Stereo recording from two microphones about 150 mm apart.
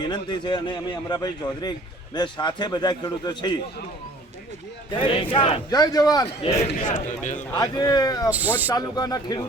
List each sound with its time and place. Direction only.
0.0 s a man's voice: 30° left (ahead or behind)
4.9 s a man's voice: 35° left (ahead or behind)
5.7 s a man's voice: 25° left (ahead or behind)
6.4 s a man's voice: 40° left (ahead or behind)
7.5 s a man's voice: 25° left (ahead or behind)
8.3 s speech: 10° right (ahead or behind)
8.7 s a man's voice: 25° left (ahead or behind)